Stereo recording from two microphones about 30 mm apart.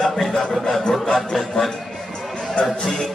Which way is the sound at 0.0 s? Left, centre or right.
Centre.